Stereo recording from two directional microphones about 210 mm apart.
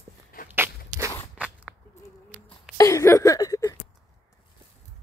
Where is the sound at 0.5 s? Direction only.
10° right (ahead or behind).